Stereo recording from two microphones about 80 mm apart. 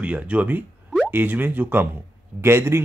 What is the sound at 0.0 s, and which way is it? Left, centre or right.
Speech, centre.